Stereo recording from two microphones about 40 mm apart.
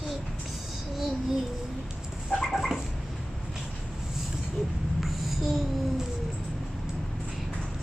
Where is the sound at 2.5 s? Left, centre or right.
Centre.